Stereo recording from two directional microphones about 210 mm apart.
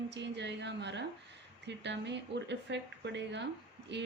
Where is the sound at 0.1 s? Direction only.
55° right (ahead or behind).